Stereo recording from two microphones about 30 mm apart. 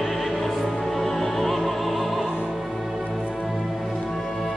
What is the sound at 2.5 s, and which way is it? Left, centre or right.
Music, centre.